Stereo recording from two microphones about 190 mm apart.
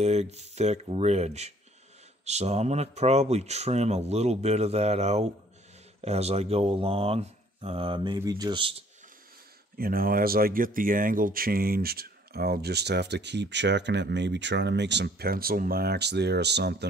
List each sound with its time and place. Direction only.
0.0 s speech: 35° right (ahead or behind)
9.8 s speech: 50° right (ahead or behind)